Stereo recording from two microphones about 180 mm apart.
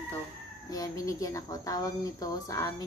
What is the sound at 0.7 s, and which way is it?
Speech, 20° left (ahead or behind).